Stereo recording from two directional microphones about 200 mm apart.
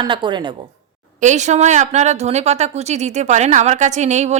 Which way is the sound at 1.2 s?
35° right (ahead or behind).